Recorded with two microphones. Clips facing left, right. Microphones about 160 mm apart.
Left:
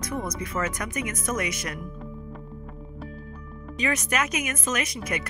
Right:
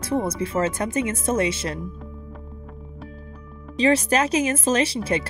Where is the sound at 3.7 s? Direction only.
30° right (ahead or behind).